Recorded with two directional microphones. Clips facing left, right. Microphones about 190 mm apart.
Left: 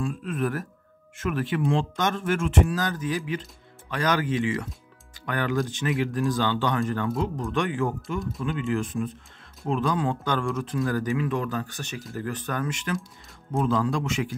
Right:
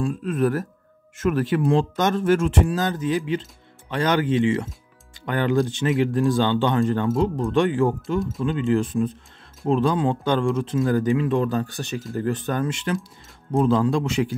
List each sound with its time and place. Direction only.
0.0 s speech: 35° right (ahead or behind)
8.2 s speech: centre (ahead or behind)
8.5 s speech: 30° right (ahead or behind)